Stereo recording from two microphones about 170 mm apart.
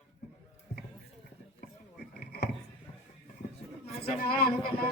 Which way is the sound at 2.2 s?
65° left (ahead or behind).